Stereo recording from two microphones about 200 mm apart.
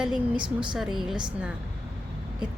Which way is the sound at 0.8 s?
Centre (ahead or behind).